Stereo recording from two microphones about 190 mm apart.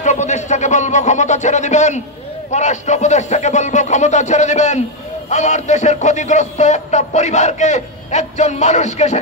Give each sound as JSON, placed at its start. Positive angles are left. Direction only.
{"t": 0.0, "sound": "speech", "side_deg": 40}